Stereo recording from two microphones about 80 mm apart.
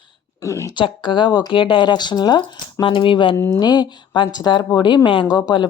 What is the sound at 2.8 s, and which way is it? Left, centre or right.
Speech, left.